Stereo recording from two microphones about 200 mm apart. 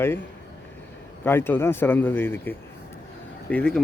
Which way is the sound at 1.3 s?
10° left (ahead or behind).